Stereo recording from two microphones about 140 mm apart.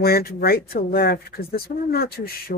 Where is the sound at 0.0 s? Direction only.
90° left.